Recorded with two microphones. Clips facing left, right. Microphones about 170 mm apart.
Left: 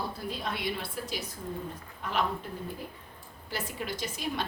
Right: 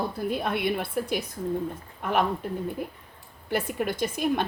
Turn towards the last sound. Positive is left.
turn(degrees=-55)  # may be behind; listen again after turning